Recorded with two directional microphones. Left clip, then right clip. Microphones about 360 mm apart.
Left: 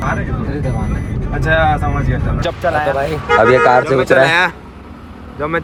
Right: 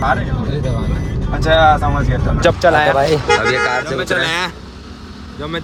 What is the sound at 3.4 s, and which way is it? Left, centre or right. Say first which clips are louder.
Speech: left 6 dB; centre.